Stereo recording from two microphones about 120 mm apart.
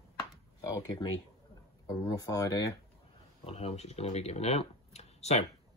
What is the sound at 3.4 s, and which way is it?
Speech, 60° left (ahead or behind).